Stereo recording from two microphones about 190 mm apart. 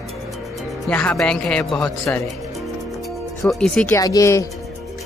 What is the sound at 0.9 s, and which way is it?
Speech, 5° left (ahead or behind).